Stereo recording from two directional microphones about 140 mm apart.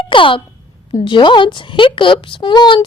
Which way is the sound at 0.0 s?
35° left (ahead or behind).